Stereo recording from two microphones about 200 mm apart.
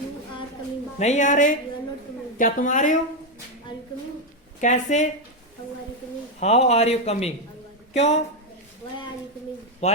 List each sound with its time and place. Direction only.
0.9 s a man's voice: 35° left (ahead or behind)
4.6 s a man's voice: 35° left (ahead or behind)
6.4 s a man's voice: 30° left (ahead or behind)
9.8 s a man's voice: 35° left (ahead or behind)